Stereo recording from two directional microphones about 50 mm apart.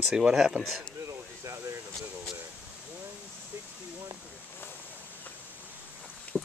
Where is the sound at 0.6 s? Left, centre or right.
Right.